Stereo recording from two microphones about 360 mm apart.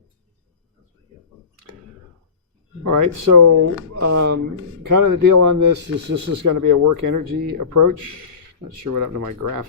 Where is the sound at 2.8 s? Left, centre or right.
Right.